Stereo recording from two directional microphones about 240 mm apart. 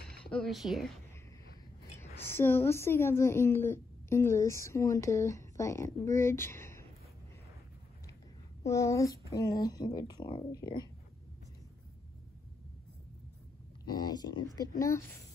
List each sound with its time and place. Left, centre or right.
0.3 s speech: centre
2.0 s a woman's voice: centre
8.6 s a woman's voice: centre
13.8 s a woman's voice: centre